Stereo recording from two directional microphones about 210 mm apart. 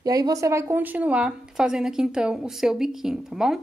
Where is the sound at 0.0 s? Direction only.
20° right (ahead or behind).